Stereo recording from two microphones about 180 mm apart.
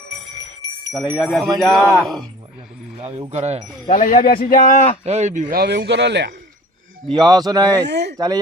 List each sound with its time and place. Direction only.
0.9 s speech: centre (ahead or behind)
3.0 s speech: 35° right (ahead or behind)
3.8 s speech: 45° left (ahead or behind)
5.0 s speech: 40° right (ahead or behind); by 6.3 s 70° right (ahead or behind)
7.1 s a man's voice: 25° right (ahead or behind)
7.9 s speech: 70° right (ahead or behind)